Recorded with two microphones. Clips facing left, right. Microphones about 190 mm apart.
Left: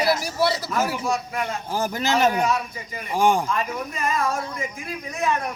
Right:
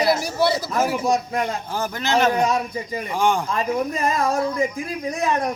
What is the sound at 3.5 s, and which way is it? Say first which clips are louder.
Speech: right 4 dB; 35° right (ahead or behind).